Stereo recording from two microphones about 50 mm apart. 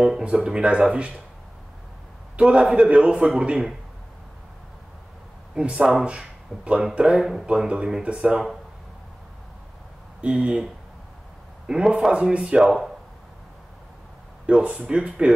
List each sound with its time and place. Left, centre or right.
0.2 s a man's voice: centre
2.3 s a man's voice: right
5.5 s a man's voice: centre
10.2 s a man's voice: right
11.7 s a man's voice: centre
12.6 s speech: centre
14.4 s a man's voice: right